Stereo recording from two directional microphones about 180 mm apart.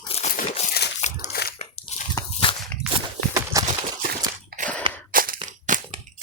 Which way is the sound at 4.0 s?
50° right (ahead or behind).